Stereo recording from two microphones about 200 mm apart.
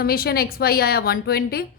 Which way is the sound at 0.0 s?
50° left (ahead or behind).